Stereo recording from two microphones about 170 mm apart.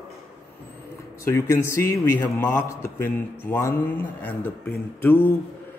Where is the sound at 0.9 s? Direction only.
15° left (ahead or behind).